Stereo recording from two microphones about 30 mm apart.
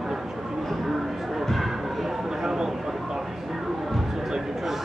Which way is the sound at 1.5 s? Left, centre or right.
Centre.